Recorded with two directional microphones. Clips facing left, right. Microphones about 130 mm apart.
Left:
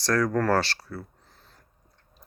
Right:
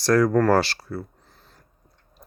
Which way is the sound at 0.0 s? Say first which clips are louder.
Right 6 dB; 10° right (ahead or behind).